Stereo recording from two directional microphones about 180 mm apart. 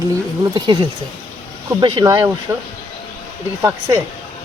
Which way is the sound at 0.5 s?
25° right (ahead or behind).